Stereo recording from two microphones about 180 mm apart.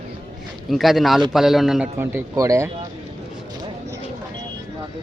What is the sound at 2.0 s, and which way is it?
Speech, 15° right (ahead or behind).